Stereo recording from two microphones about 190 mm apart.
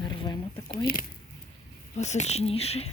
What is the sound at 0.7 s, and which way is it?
Speech, 45° left (ahead or behind).